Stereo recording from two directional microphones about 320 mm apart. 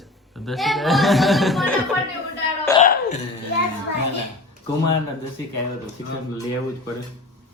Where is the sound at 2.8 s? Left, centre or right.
Left.